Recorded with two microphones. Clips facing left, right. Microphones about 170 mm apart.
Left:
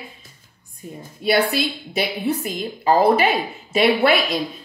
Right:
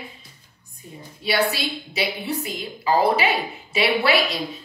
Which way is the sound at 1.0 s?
50° left (ahead or behind).